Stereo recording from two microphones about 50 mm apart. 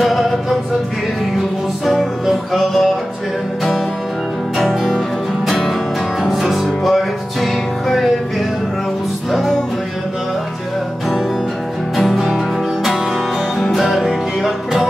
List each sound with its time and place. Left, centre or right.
0.0 s music: centre
2.2 s music: centre
4.6 s music: centre
9.3 s music: centre
12.0 s music: centre
13.6 s music: centre